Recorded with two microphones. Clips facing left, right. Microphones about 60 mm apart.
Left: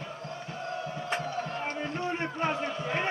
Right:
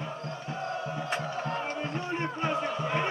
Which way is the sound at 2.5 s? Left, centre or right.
Right.